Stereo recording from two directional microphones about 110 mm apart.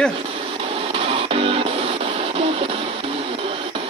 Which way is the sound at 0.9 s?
60° right (ahead or behind).